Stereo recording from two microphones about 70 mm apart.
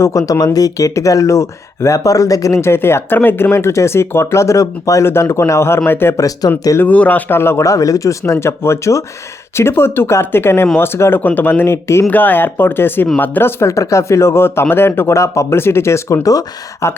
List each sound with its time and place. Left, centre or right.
0.0 s speech: left
2.6 s speech: left
6.1 s speech: left
6.8 s speech: left
7.6 s speech: left
8.3 s speech: left
12.0 s speech: left
13.6 s speech: left
16.8 s speech: left